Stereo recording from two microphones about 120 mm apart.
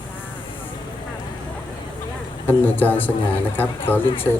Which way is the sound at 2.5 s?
15° left (ahead or behind).